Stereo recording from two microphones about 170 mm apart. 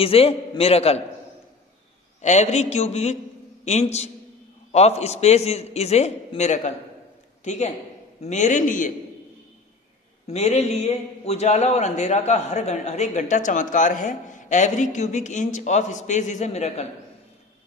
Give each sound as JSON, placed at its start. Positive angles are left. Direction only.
{"t": 0.0, "sound": "a man's voice", "side_deg": 35}
{"t": 2.2, "sound": "a man's voice", "side_deg": 40}
{"t": 10.2, "sound": "a man's voice", "side_deg": 40}